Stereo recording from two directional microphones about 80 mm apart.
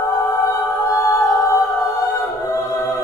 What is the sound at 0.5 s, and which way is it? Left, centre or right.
A capella, left.